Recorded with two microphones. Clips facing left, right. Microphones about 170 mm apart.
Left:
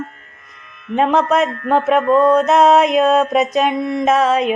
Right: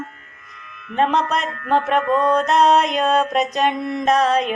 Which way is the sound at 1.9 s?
35° left (ahead or behind).